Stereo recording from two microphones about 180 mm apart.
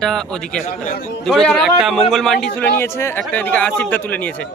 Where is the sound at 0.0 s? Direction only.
5° left (ahead or behind).